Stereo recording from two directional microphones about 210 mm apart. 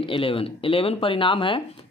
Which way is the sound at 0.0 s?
25° left (ahead or behind).